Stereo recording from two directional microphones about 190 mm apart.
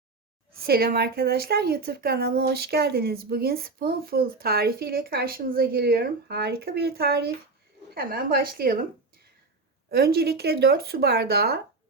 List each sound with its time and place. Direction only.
0.5 s a woman's voice: 55° right (ahead or behind)
9.9 s speech: 55° right (ahead or behind)